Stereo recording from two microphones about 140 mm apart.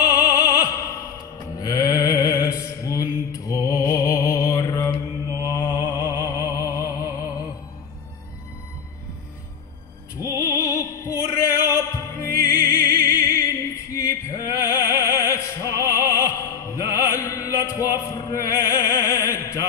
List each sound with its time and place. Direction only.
0.0 s opera: 25° left (ahead or behind)
1.6 s mantra: 25° left (ahead or behind)
5.6 s music: 25° left (ahead or behind)
10.4 s music: 20° left (ahead or behind)